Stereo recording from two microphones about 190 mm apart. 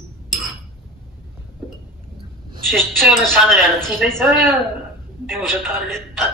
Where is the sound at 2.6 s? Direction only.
Centre (ahead or behind).